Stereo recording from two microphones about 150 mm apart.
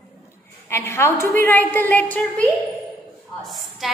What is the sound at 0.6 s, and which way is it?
A woman's voice, 20° left (ahead or behind).